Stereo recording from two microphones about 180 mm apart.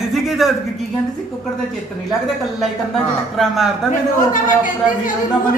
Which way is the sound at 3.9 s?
45° left (ahead or behind).